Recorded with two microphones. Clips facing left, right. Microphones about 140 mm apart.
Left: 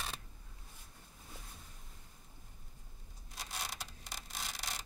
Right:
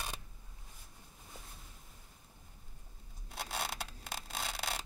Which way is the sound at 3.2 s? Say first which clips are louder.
Right 5 dB; 65° right (ahead or behind).